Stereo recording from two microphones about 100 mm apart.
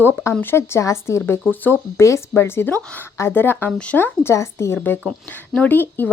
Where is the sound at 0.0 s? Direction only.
20° left (ahead or behind).